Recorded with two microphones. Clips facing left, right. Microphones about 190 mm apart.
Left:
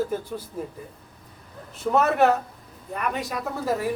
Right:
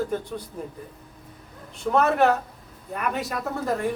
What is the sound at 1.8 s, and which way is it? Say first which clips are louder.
Speech: even; centre (ahead or behind).